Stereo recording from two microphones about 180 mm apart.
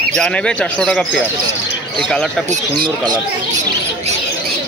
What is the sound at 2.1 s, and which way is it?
Speech, centre (ahead or behind).